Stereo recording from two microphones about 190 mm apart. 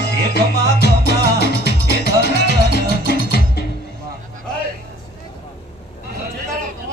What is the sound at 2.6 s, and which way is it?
Music, 60° left (ahead or behind).